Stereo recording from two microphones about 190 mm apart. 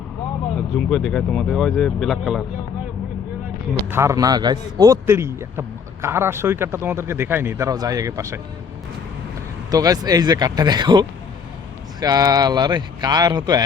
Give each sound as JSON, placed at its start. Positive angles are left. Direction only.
{"t": 0.8, "sound": "speech", "side_deg": 0}
{"t": 3.8, "sound": "speech", "side_deg": -15}
{"t": 9.6, "sound": "speech", "side_deg": -20}